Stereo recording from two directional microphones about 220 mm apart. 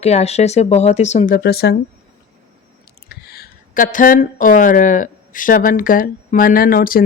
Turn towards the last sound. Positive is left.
turn(degrees=40)  # may be behind; listen again after turning